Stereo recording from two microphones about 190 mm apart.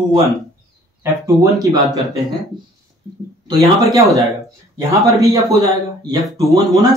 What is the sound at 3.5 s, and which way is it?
Speech, 20° right (ahead or behind).